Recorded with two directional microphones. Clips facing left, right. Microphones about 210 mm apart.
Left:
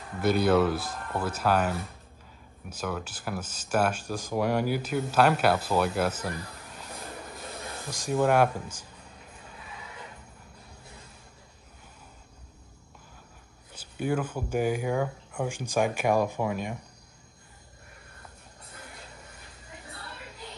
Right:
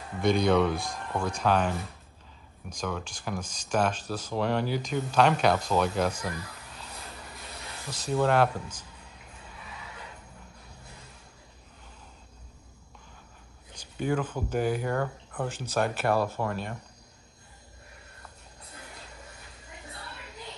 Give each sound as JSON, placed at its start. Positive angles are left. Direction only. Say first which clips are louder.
{"t": 0.2, "sound": "speech", "louder": "left 1 dB", "side_deg": 5}
{"t": 7.9, "sound": "speech", "louder": "left 1 dB", "side_deg": 10}
{"t": 13.9, "sound": "speech", "louder": "even", "side_deg": 10}